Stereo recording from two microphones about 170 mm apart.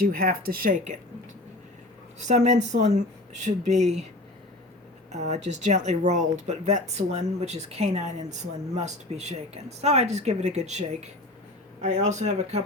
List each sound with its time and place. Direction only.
0.0 s speech: 55° right (ahead or behind)
2.1 s speech: 40° right (ahead or behind)
5.1 s speech: 45° right (ahead or behind)